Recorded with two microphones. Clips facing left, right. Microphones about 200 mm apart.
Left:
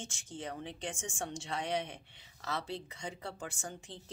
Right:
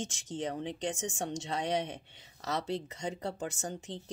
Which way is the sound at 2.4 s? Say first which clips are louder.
Right 5 dB; 40° right (ahead or behind).